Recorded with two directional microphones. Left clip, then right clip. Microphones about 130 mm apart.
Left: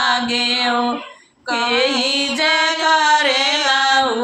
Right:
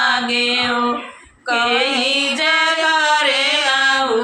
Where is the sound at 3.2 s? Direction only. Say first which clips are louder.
Even; 40° left (ahead or behind).